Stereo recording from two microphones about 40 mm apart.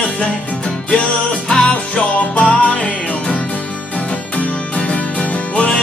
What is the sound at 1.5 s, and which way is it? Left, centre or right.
Music, left.